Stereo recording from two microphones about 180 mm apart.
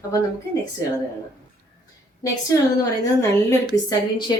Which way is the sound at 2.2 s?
20° left (ahead or behind).